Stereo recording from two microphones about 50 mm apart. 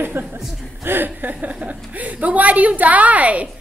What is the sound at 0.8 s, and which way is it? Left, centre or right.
Speech, right.